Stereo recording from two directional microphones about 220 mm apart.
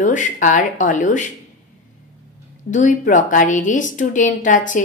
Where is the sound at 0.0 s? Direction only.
35° left (ahead or behind).